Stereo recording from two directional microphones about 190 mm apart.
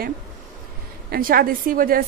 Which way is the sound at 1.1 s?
50° right (ahead or behind).